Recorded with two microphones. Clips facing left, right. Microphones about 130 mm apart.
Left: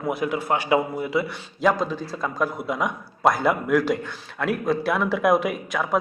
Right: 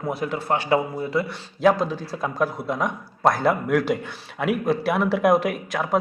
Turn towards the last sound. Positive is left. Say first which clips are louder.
# right 1 dB
turn(degrees=0)  # may be behind; listen again after turning